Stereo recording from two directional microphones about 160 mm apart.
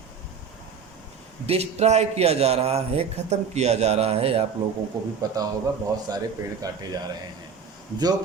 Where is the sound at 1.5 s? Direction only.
40° right (ahead or behind).